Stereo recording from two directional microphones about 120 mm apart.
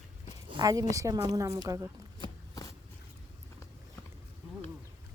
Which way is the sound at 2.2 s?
30° left (ahead or behind).